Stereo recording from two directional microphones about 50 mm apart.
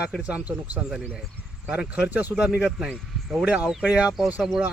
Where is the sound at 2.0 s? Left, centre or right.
Right.